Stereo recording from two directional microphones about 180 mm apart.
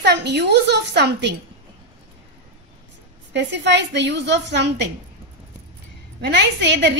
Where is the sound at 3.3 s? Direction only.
75° right (ahead or behind).